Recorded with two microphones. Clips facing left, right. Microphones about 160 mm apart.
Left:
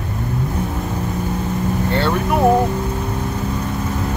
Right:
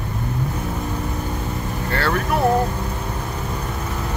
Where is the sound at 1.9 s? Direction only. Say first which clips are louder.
Left 1 dB; 20° left (ahead or behind).